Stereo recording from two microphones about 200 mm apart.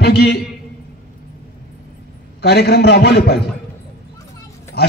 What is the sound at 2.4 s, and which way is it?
A man's voice, 55° left (ahead or behind).